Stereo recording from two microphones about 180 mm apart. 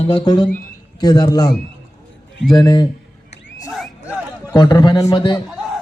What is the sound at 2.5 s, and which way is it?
Speech, 20° left (ahead or behind).